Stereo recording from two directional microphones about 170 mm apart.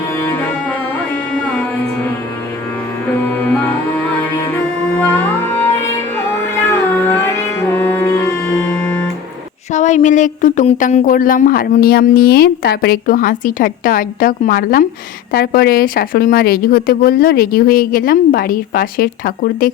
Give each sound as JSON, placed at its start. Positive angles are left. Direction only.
{"t": 3.2, "sound": "music", "side_deg": 10}
{"t": 4.9, "sound": "music", "side_deg": 10}
{"t": 6.9, "sound": "music", "side_deg": 15}
{"t": 9.7, "sound": "speech", "side_deg": 45}